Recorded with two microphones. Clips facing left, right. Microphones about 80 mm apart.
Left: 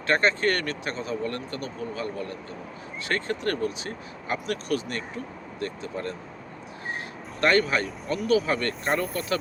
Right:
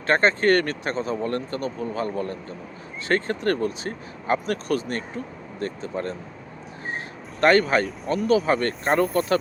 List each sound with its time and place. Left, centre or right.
0.1 s speech: right
7.4 s speech: right